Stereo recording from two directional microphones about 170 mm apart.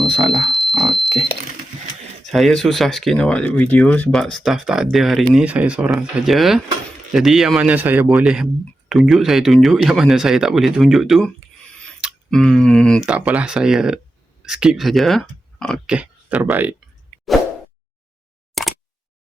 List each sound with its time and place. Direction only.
0.1 s speech: 35° right (ahead or behind)
0.4 s bicycle bell: centre (ahead or behind)
2.3 s speech: centre (ahead or behind)
13.1 s speech: 10° right (ahead or behind)
16.0 s speech: 10° right (ahead or behind)
18.6 s plop: centre (ahead or behind)